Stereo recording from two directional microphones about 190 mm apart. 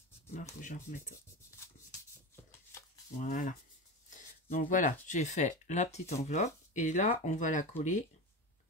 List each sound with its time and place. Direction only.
0.6 s speech: 40° left (ahead or behind)
1.9 s a sound: 15° left (ahead or behind)
3.2 s speech: 45° left (ahead or behind)